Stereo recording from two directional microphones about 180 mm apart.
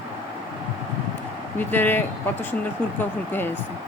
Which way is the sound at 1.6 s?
10° left (ahead or behind).